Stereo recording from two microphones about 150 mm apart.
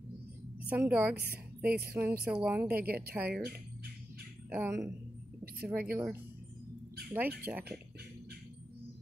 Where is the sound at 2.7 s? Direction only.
90° right.